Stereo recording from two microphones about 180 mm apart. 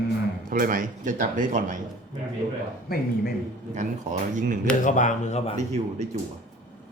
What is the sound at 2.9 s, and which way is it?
Speech, 55° left (ahead or behind).